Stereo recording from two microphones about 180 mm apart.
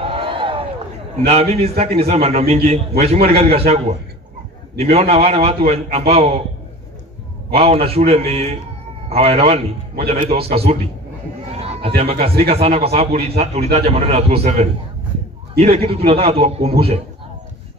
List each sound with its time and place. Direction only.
0.0 s a sound: 30° right (ahead or behind)
1.2 s a man's voice: 35° right (ahead or behind)
7.5 s a man's voice: 35° right (ahead or behind)